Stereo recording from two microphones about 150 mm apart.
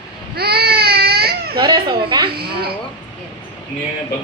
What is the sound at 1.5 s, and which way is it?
Speech, 30° right (ahead or behind).